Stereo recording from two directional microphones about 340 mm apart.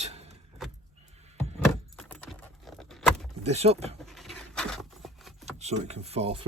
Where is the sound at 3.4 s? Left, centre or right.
Centre.